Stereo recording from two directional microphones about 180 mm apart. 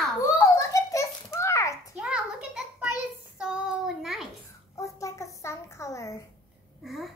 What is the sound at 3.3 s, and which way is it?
Child singing, 5° right (ahead or behind).